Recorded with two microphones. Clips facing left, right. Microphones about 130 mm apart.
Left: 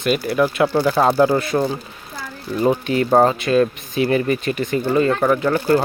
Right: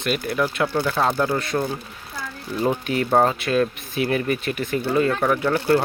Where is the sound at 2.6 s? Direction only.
Centre (ahead or behind).